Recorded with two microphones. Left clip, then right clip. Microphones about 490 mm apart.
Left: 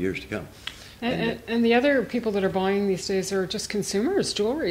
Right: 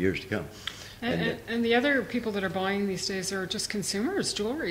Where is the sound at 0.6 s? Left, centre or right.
Left.